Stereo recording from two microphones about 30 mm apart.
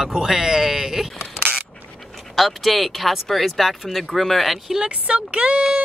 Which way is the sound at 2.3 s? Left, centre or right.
Centre.